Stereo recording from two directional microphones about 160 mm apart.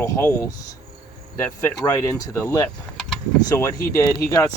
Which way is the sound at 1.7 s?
20° left (ahead or behind).